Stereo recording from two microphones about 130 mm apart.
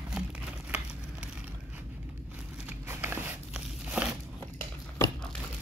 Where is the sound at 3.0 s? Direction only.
10° right (ahead or behind).